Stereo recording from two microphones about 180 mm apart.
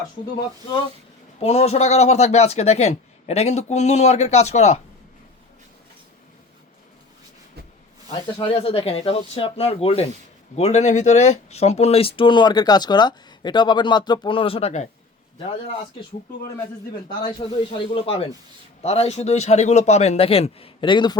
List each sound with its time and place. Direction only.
1.4 s speech: 35° left (ahead or behind)
8.4 s speech: 30° left (ahead or behind)
17.2 s speech: 30° left (ahead or behind)